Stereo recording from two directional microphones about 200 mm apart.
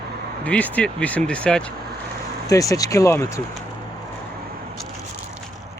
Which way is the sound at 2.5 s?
15° left (ahead or behind).